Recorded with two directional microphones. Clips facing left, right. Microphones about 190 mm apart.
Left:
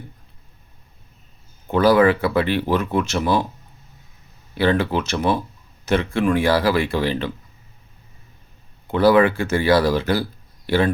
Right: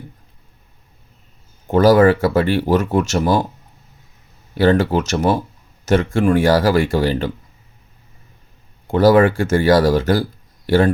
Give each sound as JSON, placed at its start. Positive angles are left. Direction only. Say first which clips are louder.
{"t": 1.7, "sound": "speech", "louder": "right 4 dB", "side_deg": -45}
{"t": 4.5, "sound": "speech", "louder": "right 4 dB", "side_deg": -45}
{"t": 8.9, "sound": "speech", "louder": "right 3 dB", "side_deg": -40}